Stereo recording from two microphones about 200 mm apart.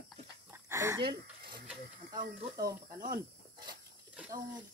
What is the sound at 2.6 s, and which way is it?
Speech, 45° right (ahead or behind).